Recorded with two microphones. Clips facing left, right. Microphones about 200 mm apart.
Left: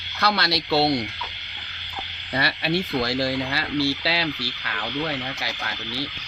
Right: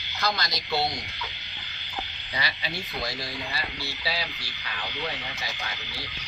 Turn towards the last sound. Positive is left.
turn(degrees=75)  # may be behind; listen again after turning